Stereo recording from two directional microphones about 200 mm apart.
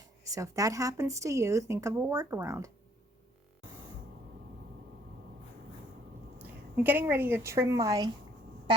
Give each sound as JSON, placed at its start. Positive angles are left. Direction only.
{"t": 0.3, "sound": "speech", "side_deg": -15}
{"t": 6.4, "sound": "a woman's voice", "side_deg": -10}